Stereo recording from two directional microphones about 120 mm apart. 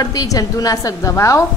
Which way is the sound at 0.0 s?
30° left (ahead or behind).